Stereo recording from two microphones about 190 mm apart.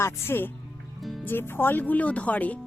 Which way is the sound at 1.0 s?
Centre (ahead or behind).